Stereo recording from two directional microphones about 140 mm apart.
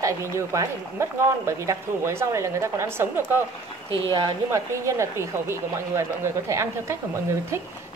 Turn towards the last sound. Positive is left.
turn(degrees=-20)  # may be behind; listen again after turning